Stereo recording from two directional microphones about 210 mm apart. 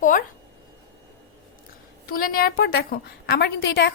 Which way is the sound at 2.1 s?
45° left (ahead or behind).